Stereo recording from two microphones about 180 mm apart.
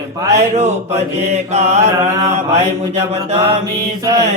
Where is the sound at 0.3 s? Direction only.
40° right (ahead or behind).